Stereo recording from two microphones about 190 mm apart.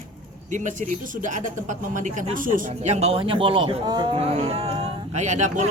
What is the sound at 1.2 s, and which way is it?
Speech, 40° right (ahead or behind).